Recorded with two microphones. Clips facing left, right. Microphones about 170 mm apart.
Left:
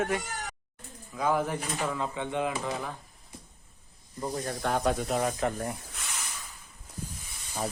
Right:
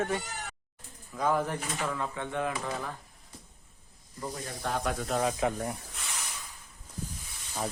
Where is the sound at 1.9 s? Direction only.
15° left (ahead or behind).